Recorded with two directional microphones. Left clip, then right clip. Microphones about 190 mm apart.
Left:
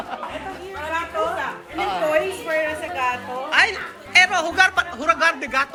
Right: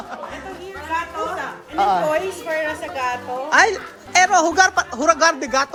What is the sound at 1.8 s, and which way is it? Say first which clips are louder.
Speech: right 3 dB; 40° right (ahead or behind).